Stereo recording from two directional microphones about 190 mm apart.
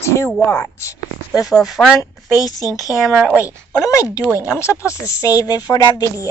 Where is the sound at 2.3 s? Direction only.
15° left (ahead or behind).